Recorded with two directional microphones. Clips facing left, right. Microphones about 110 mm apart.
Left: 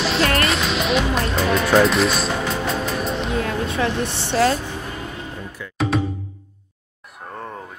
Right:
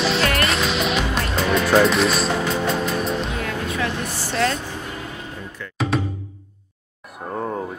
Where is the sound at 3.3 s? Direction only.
30° left (ahead or behind).